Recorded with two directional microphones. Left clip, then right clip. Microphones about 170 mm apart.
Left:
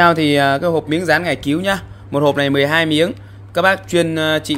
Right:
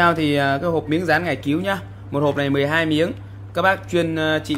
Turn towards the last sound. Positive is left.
turn(degrees=55)  # may be behind; listen again after turning